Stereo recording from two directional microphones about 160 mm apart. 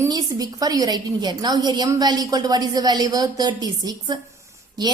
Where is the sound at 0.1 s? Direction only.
25° right (ahead or behind).